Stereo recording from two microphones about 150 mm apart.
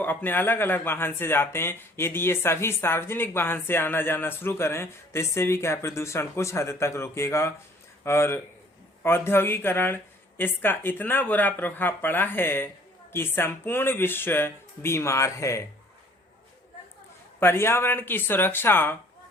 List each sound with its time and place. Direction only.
0.0 s speech: 10° left (ahead or behind)
17.4 s speech: 15° left (ahead or behind)